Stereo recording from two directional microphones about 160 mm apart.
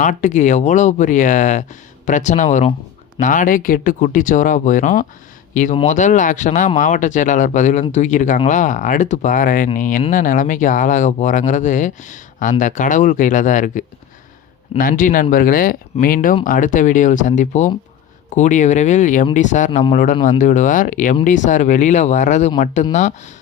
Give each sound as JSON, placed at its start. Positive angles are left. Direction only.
{"t": 0.0, "sound": "speech", "side_deg": 50}